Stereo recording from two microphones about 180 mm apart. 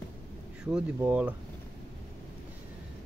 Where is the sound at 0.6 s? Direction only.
5° right (ahead or behind).